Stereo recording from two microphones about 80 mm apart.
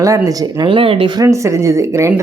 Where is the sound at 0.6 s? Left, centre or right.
Right.